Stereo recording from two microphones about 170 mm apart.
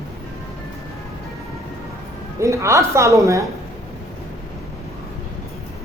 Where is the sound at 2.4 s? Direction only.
15° right (ahead or behind).